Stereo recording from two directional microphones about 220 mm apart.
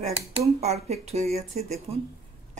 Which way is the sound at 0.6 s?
30° right (ahead or behind).